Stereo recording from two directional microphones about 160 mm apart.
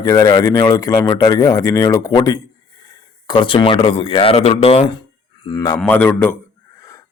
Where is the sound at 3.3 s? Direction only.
30° left (ahead or behind).